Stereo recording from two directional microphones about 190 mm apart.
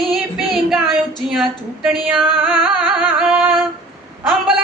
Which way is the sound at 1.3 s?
Centre (ahead or behind).